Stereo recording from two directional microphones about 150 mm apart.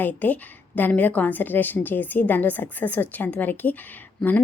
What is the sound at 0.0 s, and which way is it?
A woman's voice, 10° left (ahead or behind).